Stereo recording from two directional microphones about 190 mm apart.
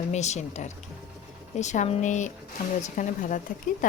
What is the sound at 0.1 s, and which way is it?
A woman's voice, 35° left (ahead or behind).